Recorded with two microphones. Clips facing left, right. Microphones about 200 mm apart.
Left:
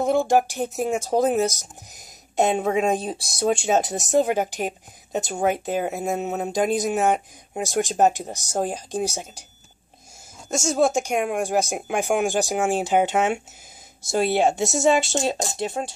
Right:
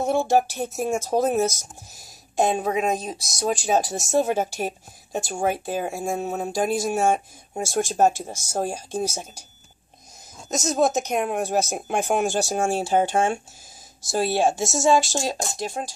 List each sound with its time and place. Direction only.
0.0 s speech: 15° left (ahead or behind)
10.6 s speech: 10° left (ahead or behind)